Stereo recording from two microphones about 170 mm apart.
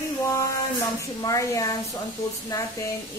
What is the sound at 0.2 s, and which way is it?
A woman's voice, 15° left (ahead or behind).